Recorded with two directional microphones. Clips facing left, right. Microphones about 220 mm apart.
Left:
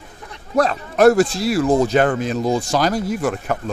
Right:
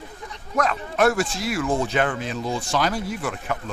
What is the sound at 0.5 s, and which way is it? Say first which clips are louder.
Speech: left 6 dB; 35° left (ahead or behind).